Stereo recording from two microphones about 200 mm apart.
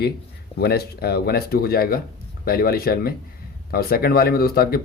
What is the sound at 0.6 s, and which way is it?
Speech, 50° left (ahead or behind).